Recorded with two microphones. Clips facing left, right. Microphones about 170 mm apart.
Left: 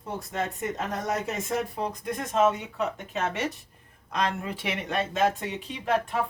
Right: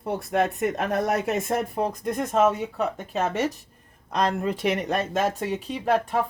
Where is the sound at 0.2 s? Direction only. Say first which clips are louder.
Right 8 dB; 65° right (ahead or behind).